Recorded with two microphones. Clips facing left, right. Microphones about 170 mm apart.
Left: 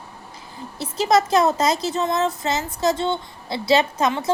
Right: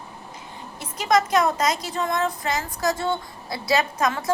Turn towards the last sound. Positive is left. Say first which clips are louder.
# left 2 dB
turn(degrees=25)  # may be behind; listen again after turning